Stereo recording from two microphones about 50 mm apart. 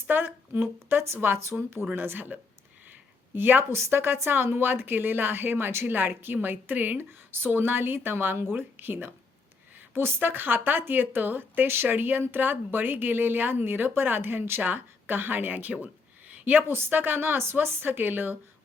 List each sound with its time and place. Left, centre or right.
0.1 s a woman's voice: right
3.6 s a woman's voice: right